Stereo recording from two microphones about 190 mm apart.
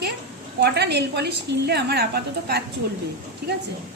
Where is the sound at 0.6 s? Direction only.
60° right (ahead or behind).